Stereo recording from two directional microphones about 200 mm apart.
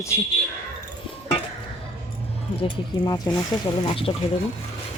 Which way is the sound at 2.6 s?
20° left (ahead or behind).